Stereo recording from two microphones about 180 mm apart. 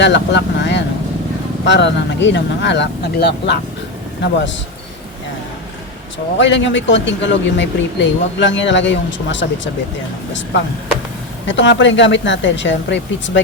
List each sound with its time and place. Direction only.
0.0 s speech: 80° left
6.4 s speech: 85° left
11.4 s speech: 90° left